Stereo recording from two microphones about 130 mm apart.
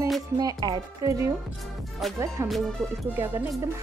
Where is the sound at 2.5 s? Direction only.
5° left (ahead or behind).